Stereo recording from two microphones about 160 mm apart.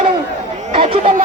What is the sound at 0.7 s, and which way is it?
Speech, 35° right (ahead or behind).